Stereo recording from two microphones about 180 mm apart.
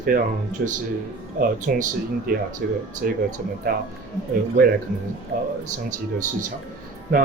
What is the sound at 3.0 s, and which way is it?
Speech, 55° right (ahead or behind).